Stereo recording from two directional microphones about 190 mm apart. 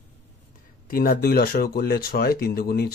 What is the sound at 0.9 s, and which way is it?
Speech, 50° left (ahead or behind).